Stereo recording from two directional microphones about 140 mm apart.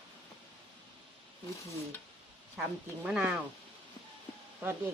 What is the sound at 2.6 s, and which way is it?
Speech, 5° right (ahead or behind).